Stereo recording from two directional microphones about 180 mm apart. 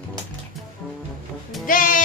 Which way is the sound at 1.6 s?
50° left (ahead or behind).